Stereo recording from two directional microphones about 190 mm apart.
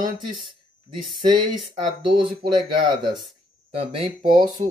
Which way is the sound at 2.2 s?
25° right (ahead or behind).